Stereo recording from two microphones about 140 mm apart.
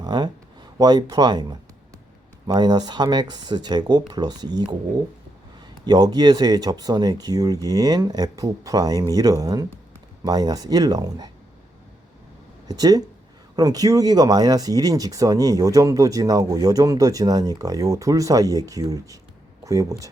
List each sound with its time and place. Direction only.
0.0 s speech: 30° right (ahead or behind)
12.6 s speech: 25° right (ahead or behind)